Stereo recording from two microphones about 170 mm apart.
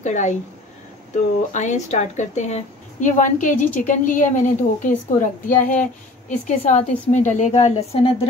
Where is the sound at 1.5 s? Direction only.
45° left (ahead or behind).